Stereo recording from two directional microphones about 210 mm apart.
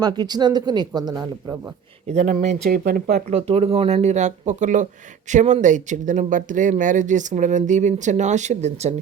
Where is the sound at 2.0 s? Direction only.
35° right (ahead or behind).